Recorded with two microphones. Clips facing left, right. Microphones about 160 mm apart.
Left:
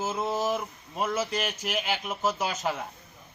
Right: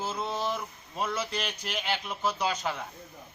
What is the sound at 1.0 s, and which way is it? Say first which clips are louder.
Speech: left 3 dB; 10° left (ahead or behind).